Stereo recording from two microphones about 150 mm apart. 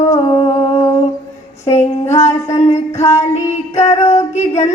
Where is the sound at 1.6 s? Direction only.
20° left (ahead or behind).